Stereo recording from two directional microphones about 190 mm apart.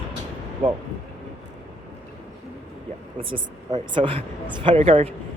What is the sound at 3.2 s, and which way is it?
Speech, 25° right (ahead or behind).